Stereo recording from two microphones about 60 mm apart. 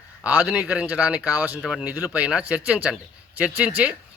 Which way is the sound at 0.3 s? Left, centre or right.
Right.